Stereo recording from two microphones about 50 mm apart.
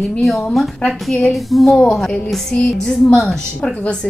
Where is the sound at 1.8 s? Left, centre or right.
Centre.